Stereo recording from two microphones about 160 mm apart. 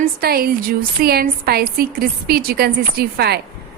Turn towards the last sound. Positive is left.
turn(degrees=-85)